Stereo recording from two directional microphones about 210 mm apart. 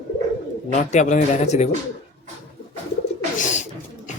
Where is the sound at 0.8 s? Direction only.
35° left (ahead or behind).